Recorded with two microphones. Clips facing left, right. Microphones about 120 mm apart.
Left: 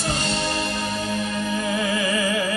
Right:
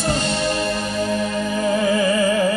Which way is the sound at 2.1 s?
40° right (ahead or behind).